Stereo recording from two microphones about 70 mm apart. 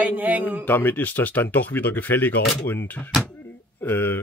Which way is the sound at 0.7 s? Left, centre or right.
Left.